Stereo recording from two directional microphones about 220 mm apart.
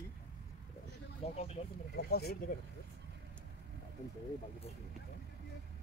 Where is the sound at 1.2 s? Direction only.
30° left (ahead or behind).